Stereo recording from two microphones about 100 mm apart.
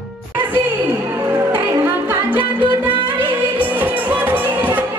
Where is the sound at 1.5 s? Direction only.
20° right (ahead or behind).